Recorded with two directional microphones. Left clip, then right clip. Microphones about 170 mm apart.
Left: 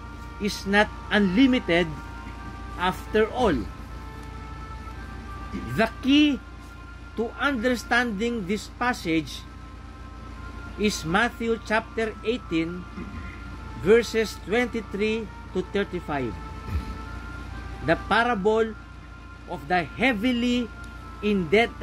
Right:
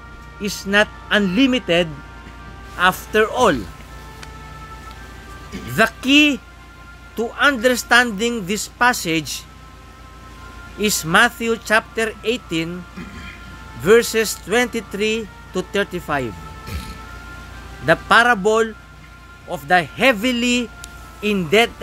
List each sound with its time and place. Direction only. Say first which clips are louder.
0.4 s a man's voice: right 5 dB; 45° right (ahead or behind)
7.2 s a man's voice: right 9 dB; 60° right (ahead or behind)
10.8 s a man's voice: right 9 dB; 55° right (ahead or behind)
13.8 s a man's voice: right 6 dB; 60° right (ahead or behind)
17.8 s a man's voice: right 9 dB; 55° right (ahead or behind)